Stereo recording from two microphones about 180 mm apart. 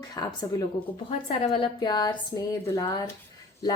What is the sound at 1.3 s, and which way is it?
Speech, 30° left (ahead or behind).